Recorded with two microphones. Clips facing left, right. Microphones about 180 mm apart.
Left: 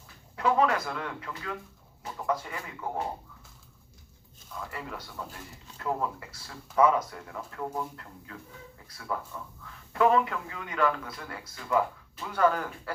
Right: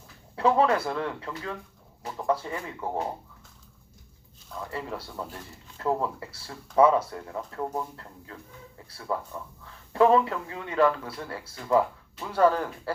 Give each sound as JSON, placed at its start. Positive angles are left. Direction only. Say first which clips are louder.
{"t": 0.3, "sound": "speech", "louder": "right 3 dB", "side_deg": -30}
{"t": 4.7, "sound": "a man's voice", "louder": "right 5 dB", "side_deg": -30}